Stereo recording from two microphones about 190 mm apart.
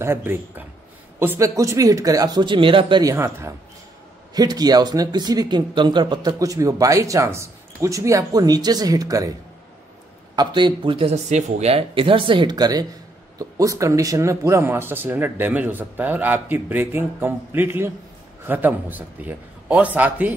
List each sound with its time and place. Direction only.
0.0 s speech: 10° right (ahead or behind)